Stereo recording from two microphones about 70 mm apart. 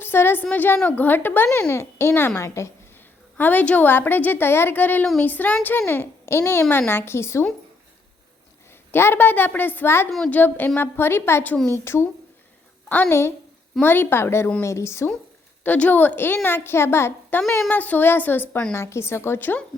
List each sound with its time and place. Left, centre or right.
0.0 s a sound: left
0.5 s a woman's voice: left
1.7 s a woman's voice: left
3.3 s a woman's voice: left
5.8 s a woman's voice: left
8.9 s a woman's voice: left
13.1 s a woman's voice: left
13.8 s a woman's voice: left
15.6 s a woman's voice: left
17.7 s a woman's voice: left
18.7 s a woman's voice: left